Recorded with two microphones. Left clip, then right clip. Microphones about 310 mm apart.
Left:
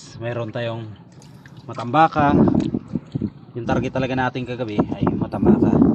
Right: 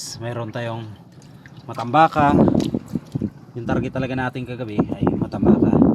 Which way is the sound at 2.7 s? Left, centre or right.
Centre.